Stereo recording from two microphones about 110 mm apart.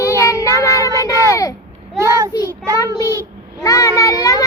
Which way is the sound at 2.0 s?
30° right (ahead or behind).